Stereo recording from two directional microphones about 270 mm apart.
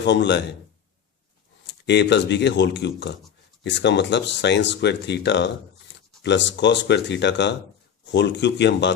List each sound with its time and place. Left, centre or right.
0.0 s speech: left
1.6 s speech: left